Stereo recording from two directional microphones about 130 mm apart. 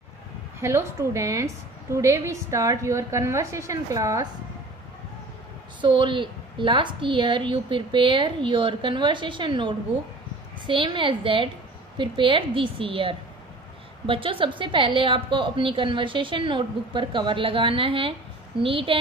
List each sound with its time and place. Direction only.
0.6 s a woman's voice: 20° right (ahead or behind)
5.8 s a woman's voice: 40° right (ahead or behind)